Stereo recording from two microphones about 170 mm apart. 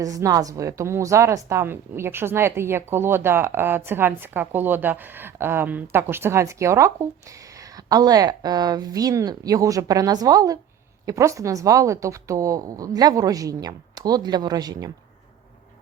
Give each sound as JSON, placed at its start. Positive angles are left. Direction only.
{"t": 0.0, "sound": "a woman's voice", "side_deg": -20}